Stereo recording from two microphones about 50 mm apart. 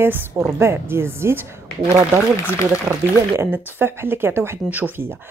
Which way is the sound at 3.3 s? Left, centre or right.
Right.